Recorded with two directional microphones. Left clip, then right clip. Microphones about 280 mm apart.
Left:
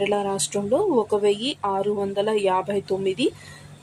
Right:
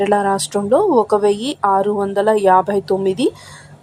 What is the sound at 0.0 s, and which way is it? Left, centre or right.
A woman's voice, centre.